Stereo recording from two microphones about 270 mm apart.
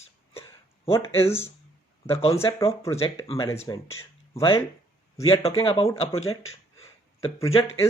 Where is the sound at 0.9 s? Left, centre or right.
Centre.